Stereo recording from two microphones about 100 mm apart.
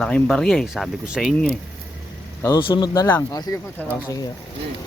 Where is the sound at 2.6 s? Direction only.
60° left (ahead or behind).